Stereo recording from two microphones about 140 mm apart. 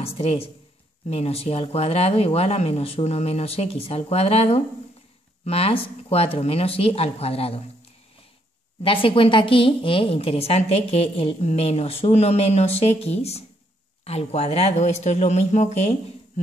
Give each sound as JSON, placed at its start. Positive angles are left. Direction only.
{"t": 0.0, "sound": "a woman's voice", "side_deg": 45}
{"t": 8.8, "sound": "a woman's voice", "side_deg": 40}